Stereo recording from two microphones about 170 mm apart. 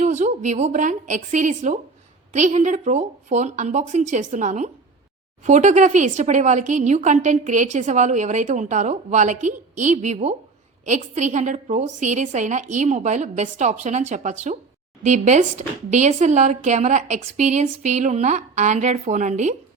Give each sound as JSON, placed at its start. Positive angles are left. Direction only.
{"t": 0.0, "sound": "speech", "side_deg": -40}